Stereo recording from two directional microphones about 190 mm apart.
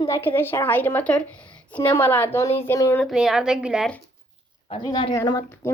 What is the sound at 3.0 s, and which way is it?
Speech, centre (ahead or behind).